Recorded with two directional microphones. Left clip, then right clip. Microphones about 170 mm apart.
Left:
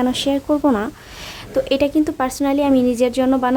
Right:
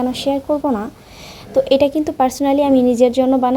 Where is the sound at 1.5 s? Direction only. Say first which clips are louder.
Right 3 dB; centre (ahead or behind).